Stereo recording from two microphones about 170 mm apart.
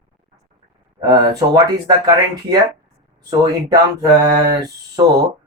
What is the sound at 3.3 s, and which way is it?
Speech, 20° right (ahead or behind).